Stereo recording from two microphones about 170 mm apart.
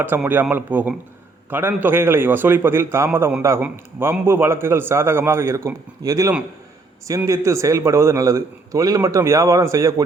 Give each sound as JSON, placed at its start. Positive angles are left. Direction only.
{"t": 0.0, "sound": "a man's voice", "side_deg": -10}